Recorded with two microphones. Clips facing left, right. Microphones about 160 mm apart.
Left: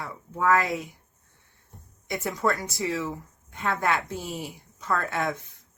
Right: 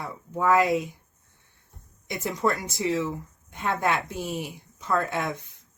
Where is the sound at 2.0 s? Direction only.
20° right (ahead or behind).